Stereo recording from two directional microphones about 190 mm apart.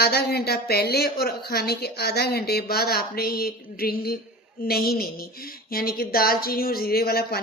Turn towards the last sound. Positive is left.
turn(degrees=55)  # may be behind; listen again after turning